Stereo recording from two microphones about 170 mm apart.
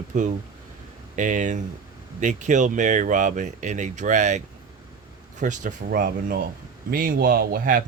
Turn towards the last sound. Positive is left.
turn(degrees=-60)  # may be behind; listen again after turning